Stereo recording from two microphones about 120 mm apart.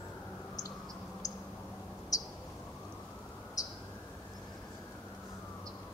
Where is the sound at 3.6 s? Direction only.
30° left (ahead or behind).